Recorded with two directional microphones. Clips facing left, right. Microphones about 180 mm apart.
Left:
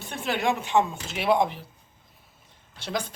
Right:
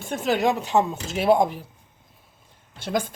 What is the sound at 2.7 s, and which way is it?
Speech, 50° right (ahead or behind).